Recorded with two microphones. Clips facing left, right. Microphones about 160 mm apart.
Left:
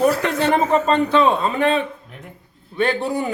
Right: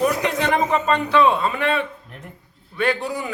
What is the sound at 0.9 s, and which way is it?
Speech, 25° left (ahead or behind).